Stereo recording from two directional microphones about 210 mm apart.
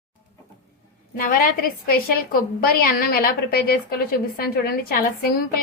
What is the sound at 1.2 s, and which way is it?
A woman's voice, 45° left (ahead or behind).